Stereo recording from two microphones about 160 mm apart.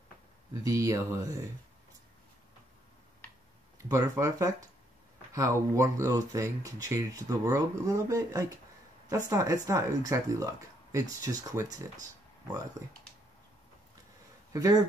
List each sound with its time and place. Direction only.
0.7 s speech: 20° right (ahead or behind)
3.7 s speech: 20° right (ahead or behind)
12.8 s speech: 25° right (ahead or behind)
14.5 s speech: 20° right (ahead or behind)